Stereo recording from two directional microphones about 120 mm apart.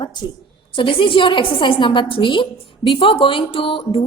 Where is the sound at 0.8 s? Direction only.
45° left (ahead or behind).